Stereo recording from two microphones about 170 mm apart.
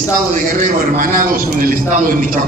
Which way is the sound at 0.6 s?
55° right (ahead or behind).